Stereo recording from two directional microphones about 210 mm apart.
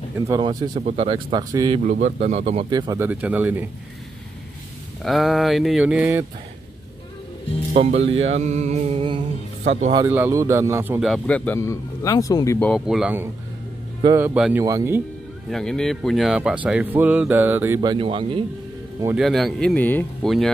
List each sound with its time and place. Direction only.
0.3 s music: 20° right (ahead or behind)
0.7 s music: 30° right (ahead or behind)
1.9 s speech: 35° right (ahead or behind); by 3.1 s 20° right (ahead or behind)
3.1 s a man's voice: 5° right (ahead or behind)
5.0 s speech: centre (ahead or behind)
7.7 s music: 30° right (ahead or behind)
9.7 s speech: 35° right (ahead or behind)
9.9 s a man's voice: 10° right (ahead or behind)
11.1 s speech: 5° left (ahead or behind)
12.5 s a man's voice: centre (ahead or behind); by 15.0 s 15° right (ahead or behind)
15.5 s speech: 5° left (ahead or behind)
17.7 s music: 20° right (ahead or behind)
19.1 s speech: centre (ahead or behind)